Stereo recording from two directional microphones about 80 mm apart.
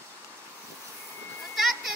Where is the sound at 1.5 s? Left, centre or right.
Centre.